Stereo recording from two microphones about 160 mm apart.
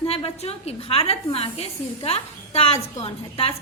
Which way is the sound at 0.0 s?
40° left (ahead or behind).